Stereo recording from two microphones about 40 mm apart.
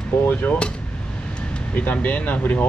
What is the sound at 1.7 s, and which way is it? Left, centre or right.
Speech, left.